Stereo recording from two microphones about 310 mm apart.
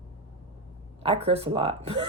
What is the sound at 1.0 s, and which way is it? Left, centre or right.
Speech, centre.